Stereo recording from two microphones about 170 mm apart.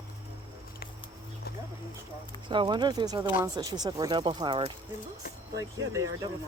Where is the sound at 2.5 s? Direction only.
25° right (ahead or behind).